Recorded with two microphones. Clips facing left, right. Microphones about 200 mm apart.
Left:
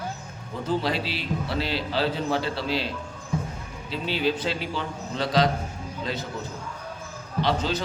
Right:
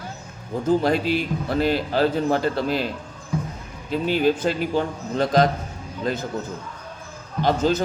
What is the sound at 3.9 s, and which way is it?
A man's voice, 50° right (ahead or behind).